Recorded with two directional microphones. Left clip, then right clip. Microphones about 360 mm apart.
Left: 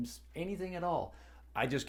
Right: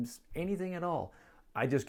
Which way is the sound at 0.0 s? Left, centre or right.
Right.